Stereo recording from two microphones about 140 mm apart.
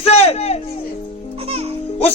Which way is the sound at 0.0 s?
45° left (ahead or behind).